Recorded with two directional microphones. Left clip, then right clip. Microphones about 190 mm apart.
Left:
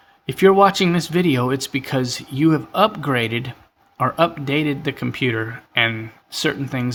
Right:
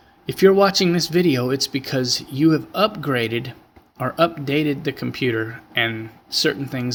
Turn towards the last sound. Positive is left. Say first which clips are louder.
# right 1 dB
turn(degrees=25)  # may be behind; listen again after turning